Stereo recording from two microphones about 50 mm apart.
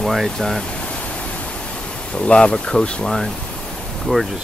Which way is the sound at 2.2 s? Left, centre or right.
Centre.